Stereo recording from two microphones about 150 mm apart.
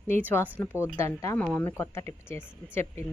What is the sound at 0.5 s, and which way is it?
A woman's voice, 15° left (ahead or behind).